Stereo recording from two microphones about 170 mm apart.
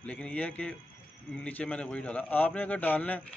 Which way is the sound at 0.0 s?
5° left (ahead or behind).